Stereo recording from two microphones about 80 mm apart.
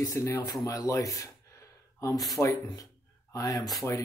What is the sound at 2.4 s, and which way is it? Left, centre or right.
Speech, left.